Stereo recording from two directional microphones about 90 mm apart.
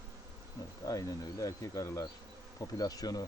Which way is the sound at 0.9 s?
40° left (ahead or behind).